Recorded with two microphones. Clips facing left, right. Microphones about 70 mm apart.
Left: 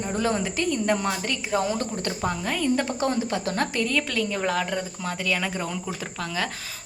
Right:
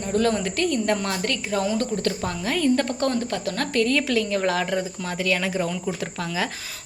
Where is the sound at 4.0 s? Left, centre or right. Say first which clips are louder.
Right 3 dB; centre.